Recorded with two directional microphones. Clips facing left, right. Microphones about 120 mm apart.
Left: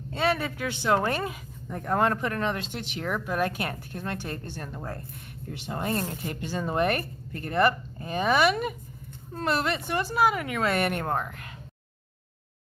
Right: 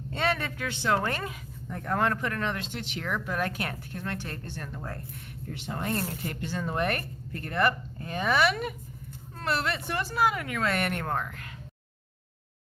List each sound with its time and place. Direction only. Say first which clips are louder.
0.2 s speech: left 3 dB; 5° left (ahead or behind)
5.8 s speech: left 2 dB; 15° left (ahead or behind)